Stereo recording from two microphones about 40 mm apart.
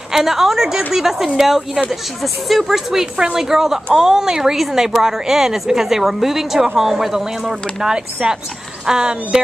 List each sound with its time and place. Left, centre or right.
0.1 s speech: centre
7.9 s speech: right